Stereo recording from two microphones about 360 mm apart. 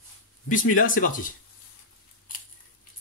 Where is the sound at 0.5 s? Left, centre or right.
Left.